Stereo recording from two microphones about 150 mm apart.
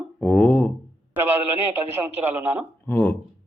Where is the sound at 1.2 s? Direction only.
15° right (ahead or behind).